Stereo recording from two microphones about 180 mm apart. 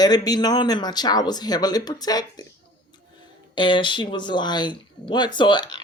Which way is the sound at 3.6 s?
25° left (ahead or behind).